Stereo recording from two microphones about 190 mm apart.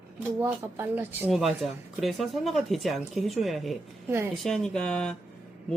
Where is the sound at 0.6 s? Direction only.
10° right (ahead or behind).